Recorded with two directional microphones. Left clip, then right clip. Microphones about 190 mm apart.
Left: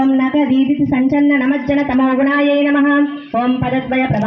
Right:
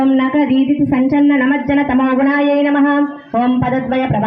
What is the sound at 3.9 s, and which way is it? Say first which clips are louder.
Speech: left 1 dB; 35° left (ahead or behind).